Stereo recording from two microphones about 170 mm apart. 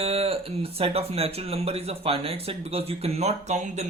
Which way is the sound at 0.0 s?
35° right (ahead or behind).